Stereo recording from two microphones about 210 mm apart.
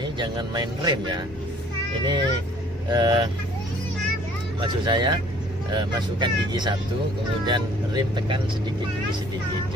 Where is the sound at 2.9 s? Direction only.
20° right (ahead or behind).